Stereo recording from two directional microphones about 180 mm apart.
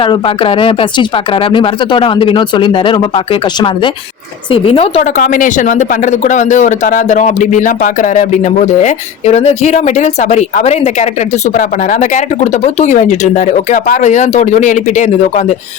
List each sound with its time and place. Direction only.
0.0 s speech: 30° left (ahead or behind)
4.5 s a woman's voice: 30° left (ahead or behind)
5.1 s speech: 50° left (ahead or behind)